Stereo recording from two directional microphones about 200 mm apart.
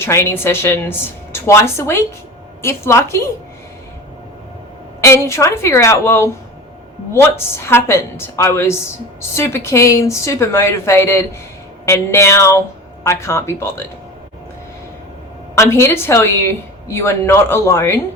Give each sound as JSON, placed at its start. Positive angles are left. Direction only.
{"t": 0.0, "sound": "a woman's voice", "side_deg": 15}
{"t": 4.9, "sound": "a woman's voice", "side_deg": 15}
{"t": 15.5, "sound": "a woman's voice", "side_deg": 15}